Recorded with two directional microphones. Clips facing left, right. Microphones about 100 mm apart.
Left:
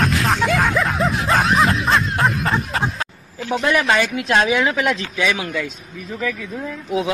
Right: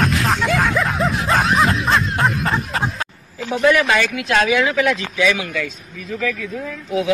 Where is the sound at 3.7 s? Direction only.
25° left (ahead or behind).